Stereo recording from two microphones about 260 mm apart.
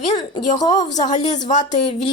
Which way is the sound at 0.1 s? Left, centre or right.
Centre.